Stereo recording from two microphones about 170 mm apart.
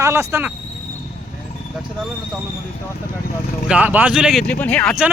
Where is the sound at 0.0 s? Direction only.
15° right (ahead or behind).